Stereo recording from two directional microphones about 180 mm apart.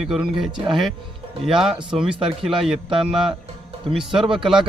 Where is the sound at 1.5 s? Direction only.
Centre (ahead or behind).